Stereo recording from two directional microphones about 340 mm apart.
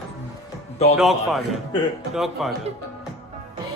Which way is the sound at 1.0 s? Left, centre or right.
Centre.